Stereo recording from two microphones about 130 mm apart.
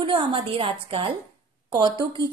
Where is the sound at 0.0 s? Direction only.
40° right (ahead or behind).